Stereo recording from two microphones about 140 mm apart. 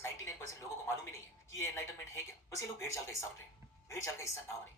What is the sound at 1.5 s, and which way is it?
A woman's voice, 20° left (ahead or behind).